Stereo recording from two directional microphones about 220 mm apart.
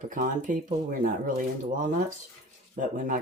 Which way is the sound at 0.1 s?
35° right (ahead or behind).